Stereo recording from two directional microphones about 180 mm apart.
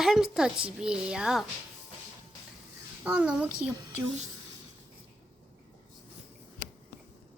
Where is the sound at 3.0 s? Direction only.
5° right (ahead or behind).